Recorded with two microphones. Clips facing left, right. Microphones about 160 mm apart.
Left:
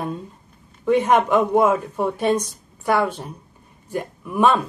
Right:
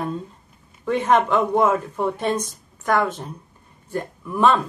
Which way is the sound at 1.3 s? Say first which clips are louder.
Left 2 dB; 10° left (ahead or behind).